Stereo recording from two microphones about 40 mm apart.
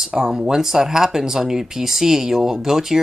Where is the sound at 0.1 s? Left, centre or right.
Centre.